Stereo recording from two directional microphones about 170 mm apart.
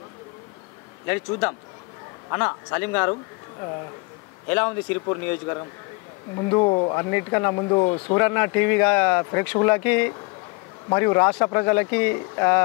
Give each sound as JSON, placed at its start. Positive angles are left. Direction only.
{"t": 1.0, "sound": "speech", "side_deg": 15}
{"t": 4.6, "sound": "speech", "side_deg": 25}
{"t": 8.2, "sound": "speech", "side_deg": 15}